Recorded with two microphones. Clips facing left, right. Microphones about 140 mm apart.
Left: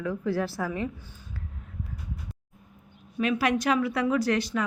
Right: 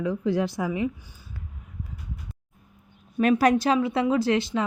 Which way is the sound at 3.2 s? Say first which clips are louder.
Right 6 dB; 45° right (ahead or behind).